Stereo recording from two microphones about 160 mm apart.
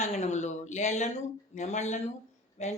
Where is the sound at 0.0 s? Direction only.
45° left (ahead or behind).